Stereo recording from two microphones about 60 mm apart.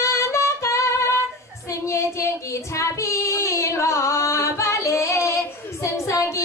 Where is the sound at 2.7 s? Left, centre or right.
Left.